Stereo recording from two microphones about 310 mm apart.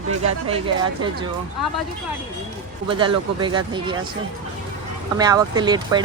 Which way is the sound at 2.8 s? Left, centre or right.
Centre.